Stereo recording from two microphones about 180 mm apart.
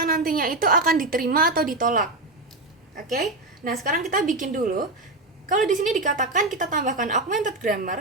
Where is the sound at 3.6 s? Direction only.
50° right (ahead or behind).